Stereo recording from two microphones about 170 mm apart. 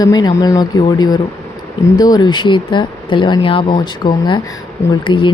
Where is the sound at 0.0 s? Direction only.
25° left (ahead or behind).